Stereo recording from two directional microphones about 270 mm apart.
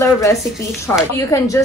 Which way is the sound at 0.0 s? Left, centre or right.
Centre.